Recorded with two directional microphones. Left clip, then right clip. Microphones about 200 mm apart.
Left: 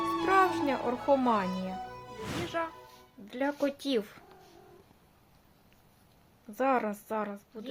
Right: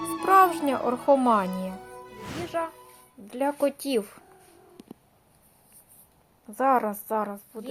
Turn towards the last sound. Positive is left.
turn(degrees=-5)  # may be behind; listen again after turning